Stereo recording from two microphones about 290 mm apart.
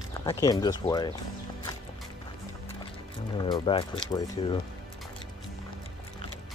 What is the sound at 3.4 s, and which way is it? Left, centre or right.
Speech, centre.